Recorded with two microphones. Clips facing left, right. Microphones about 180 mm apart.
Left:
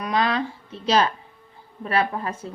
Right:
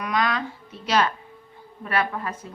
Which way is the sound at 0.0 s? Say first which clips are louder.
Left 2 dB; 30° left (ahead or behind).